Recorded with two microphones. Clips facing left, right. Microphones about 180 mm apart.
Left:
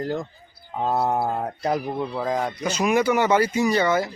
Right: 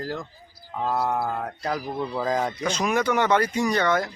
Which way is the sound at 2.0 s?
Centre (ahead or behind).